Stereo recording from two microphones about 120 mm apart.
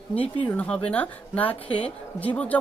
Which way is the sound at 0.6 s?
10° left (ahead or behind).